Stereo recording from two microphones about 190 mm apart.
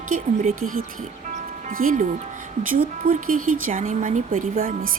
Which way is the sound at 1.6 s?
45° right (ahead or behind).